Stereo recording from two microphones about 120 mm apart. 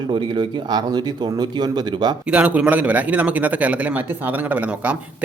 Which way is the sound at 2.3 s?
10° right (ahead or behind).